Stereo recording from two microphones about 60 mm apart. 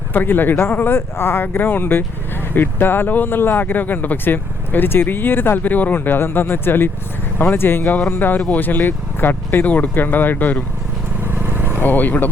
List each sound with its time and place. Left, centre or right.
0.1 s speech: left
11.2 s vehicle: right
11.8 s speech: left